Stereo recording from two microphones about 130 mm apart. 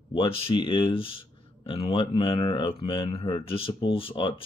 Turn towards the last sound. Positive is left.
turn(degrees=45)  # may be behind; listen again after turning